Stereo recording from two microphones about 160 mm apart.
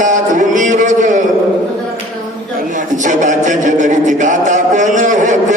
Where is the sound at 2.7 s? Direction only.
50° right (ahead or behind).